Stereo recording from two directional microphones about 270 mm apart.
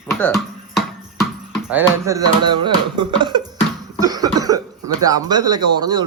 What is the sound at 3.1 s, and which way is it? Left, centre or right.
Speech, centre.